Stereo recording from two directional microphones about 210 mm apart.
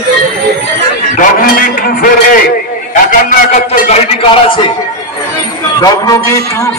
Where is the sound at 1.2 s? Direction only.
45° left (ahead or behind).